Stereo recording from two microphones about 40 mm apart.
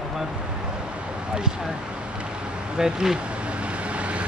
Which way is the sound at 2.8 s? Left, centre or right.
Centre.